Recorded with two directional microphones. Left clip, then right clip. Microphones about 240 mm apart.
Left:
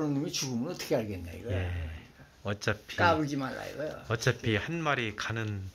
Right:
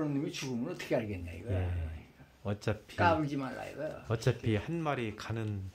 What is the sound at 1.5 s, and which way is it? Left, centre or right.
Speech, centre.